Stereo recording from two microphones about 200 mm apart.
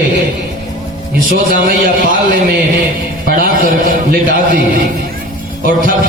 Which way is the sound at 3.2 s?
45° right (ahead or behind).